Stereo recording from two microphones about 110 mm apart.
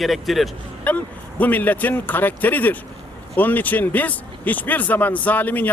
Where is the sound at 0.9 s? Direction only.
15° left (ahead or behind).